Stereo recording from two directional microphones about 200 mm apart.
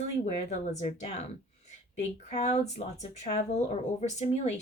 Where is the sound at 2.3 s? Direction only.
35° left (ahead or behind).